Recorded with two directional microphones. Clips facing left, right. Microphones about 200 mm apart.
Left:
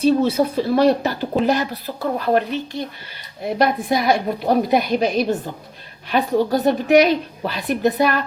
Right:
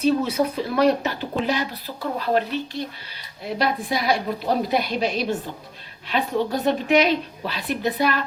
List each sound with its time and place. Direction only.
0.0 s speech: 30° left (ahead or behind)
1.5 s a woman's voice: 45° left (ahead or behind)